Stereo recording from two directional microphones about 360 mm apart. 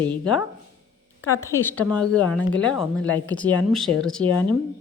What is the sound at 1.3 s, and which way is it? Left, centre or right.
Speech, centre.